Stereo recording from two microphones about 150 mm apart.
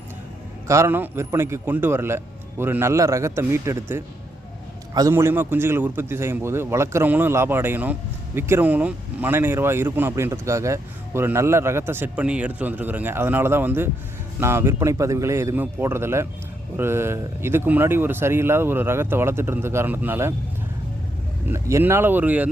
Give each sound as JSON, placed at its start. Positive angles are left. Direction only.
{"t": 0.7, "sound": "speech", "side_deg": -15}
{"t": 21.5, "sound": "speech", "side_deg": -15}